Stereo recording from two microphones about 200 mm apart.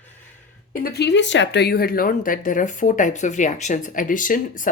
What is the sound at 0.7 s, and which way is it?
Speech, 50° left (ahead or behind).